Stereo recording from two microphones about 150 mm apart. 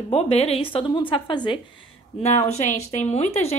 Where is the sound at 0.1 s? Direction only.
45° left (ahead or behind).